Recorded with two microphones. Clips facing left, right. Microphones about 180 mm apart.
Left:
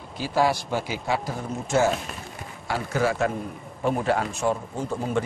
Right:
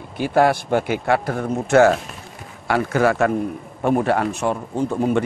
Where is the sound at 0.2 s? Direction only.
60° right (ahead or behind).